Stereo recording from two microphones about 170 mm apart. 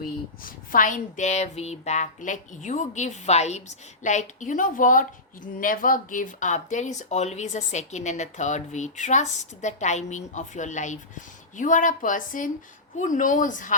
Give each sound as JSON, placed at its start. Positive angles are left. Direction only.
{"t": 0.4, "sound": "speech", "side_deg": 55}